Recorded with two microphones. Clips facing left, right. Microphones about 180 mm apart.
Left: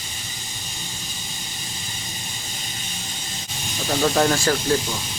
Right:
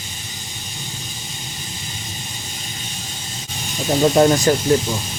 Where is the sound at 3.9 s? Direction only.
25° right (ahead or behind).